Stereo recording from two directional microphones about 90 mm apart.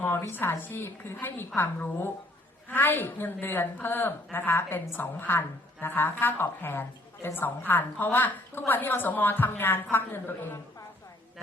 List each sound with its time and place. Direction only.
0.0 s a woman's voice: 25° left (ahead or behind)